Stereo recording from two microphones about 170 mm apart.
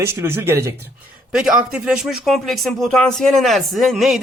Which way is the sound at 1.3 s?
5° right (ahead or behind).